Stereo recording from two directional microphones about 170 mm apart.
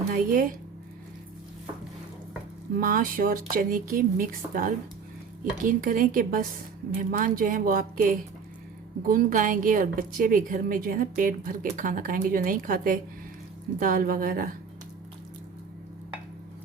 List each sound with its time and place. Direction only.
0.1 s speech: 55° right (ahead or behind)
2.7 s a woman's voice: 55° right (ahead or behind)